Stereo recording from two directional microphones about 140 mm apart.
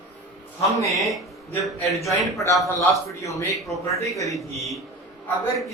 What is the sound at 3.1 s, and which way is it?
A man's voice, 25° left (ahead or behind).